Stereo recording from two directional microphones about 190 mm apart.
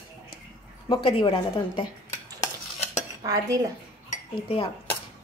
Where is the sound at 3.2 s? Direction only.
20° right (ahead or behind).